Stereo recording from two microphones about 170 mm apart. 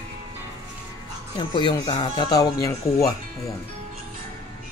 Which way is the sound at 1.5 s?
25° left (ahead or behind).